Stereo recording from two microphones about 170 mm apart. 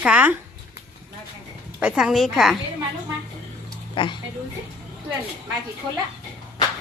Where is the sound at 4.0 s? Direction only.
30° left (ahead or behind).